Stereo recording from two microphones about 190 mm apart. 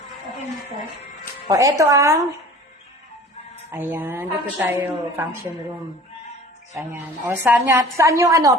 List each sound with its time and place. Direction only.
1.5 s a woman's voice: 15° right (ahead or behind)
3.7 s a woman's voice: 10° right (ahead or behind)
6.7 s a woman's voice: 15° right (ahead or behind)